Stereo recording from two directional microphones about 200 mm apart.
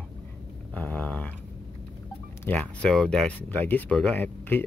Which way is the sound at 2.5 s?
5° left (ahead or behind).